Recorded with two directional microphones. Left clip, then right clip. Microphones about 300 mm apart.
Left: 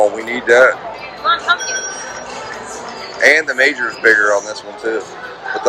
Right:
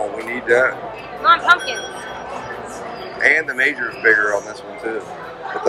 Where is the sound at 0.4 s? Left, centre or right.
Centre.